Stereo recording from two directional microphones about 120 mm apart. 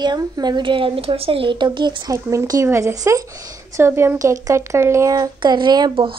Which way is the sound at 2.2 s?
30° right (ahead or behind).